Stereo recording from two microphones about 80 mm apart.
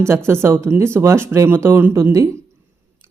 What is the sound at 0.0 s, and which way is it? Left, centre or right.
Speech, right.